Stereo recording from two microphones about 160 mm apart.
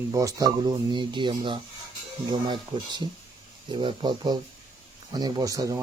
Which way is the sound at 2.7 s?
30° right (ahead or behind).